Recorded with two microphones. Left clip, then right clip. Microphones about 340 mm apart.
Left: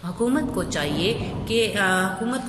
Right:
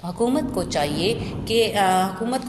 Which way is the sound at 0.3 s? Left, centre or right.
Centre.